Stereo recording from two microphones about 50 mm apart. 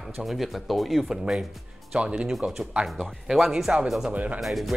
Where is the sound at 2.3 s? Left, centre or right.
Centre.